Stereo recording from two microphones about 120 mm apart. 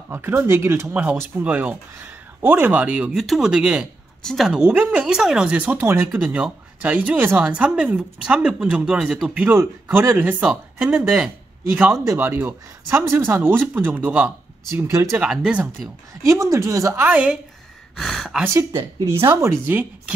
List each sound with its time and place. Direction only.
0.1 s speech: 20° right (ahead or behind)
4.2 s a woman's voice: 5° left (ahead or behind)
4.5 s speech: 10° right (ahead or behind)
14.8 s speech: 25° right (ahead or behind)
15.3 s speech: 5° right (ahead or behind)
16.3 s speech: 25° right (ahead or behind)
17.1 s speech: 10° right (ahead or behind)
17.9 s speech: centre (ahead or behind)
18.4 s speech: 25° right (ahead or behind)